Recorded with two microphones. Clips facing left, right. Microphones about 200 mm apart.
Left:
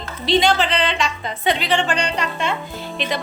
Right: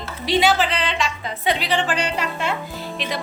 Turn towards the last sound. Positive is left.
turn(degrees=0)  # may be behind; listen again after turning